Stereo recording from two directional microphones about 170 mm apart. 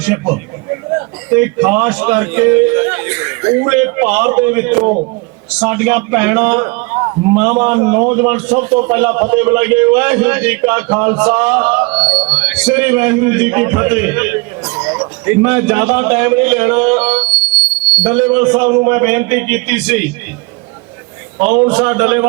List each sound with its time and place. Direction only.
0.0 s a man's voice: 10° right (ahead or behind)
21.4 s a man's voice: 10° right (ahead or behind)